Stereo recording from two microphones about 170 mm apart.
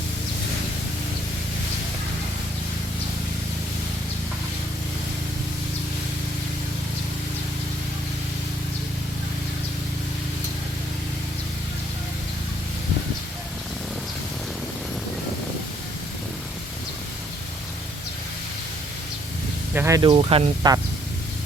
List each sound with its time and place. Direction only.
19.7 s a sound: 15° right (ahead or behind)
20.0 s speech: 30° right (ahead or behind)
20.6 s speech: 20° right (ahead or behind)